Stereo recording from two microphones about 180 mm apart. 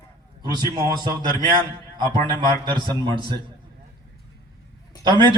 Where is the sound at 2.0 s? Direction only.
25° right (ahead or behind).